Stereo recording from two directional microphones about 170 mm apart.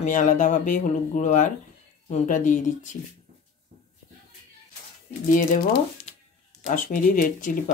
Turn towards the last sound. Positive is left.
turn(degrees=50)  # may be behind; listen again after turning